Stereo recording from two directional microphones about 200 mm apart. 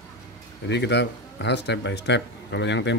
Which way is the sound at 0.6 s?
60° left (ahead or behind).